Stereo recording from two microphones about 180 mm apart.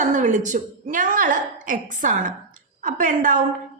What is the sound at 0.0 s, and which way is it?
A woman's voice, 45° right (ahead or behind).